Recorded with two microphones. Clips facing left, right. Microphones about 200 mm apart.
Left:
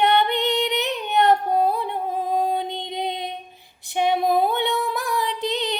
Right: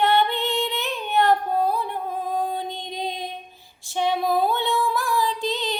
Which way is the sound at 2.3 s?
20° left (ahead or behind).